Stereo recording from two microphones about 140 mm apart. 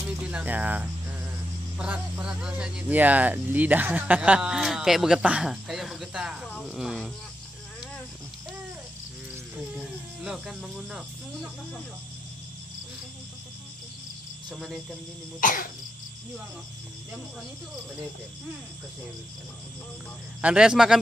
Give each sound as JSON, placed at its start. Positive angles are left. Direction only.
{"t": 0.3, "sound": "speech", "side_deg": -10}
{"t": 9.8, "sound": "speech", "side_deg": -5}
{"t": 14.5, "sound": "speech", "side_deg": -5}
{"t": 15.4, "sound": "cough", "side_deg": 80}
{"t": 20.4, "sound": "speech", "side_deg": -5}